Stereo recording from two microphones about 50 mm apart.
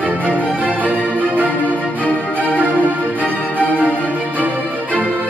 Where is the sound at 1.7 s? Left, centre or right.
Left.